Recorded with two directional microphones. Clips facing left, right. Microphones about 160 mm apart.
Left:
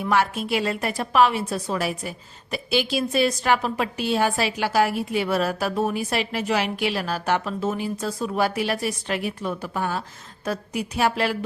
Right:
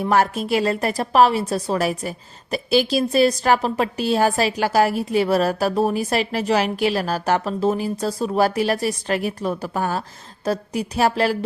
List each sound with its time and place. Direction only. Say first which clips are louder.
0.0 s a woman's voice: right 3 dB; 40° right (ahead or behind)